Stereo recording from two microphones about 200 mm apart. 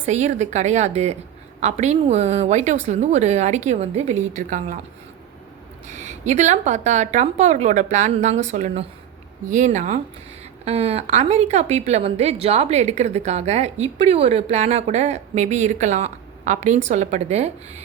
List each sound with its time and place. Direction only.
0.0 s a woman's voice: 35° right (ahead or behind)
5.9 s a woman's voice: 35° right (ahead or behind)